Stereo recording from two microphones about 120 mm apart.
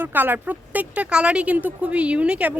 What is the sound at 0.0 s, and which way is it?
Speech, 15° right (ahead or behind).